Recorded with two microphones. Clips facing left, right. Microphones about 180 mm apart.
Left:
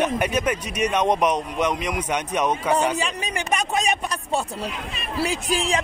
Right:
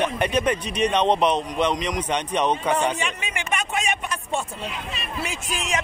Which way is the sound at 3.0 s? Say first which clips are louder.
Left 3 dB; 35° left (ahead or behind).